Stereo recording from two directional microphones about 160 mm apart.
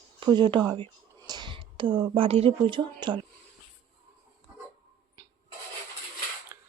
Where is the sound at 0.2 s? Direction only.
30° right (ahead or behind).